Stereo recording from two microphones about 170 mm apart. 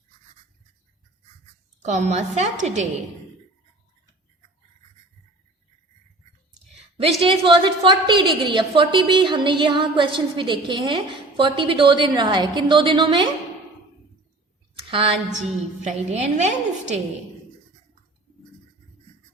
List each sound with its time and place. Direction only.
1.8 s a woman's voice: 45° right (ahead or behind)
7.2 s a woman's voice: 30° right (ahead or behind)
14.8 s a sound: 30° right (ahead or behind)
15.3 s a woman's voice: 45° right (ahead or behind)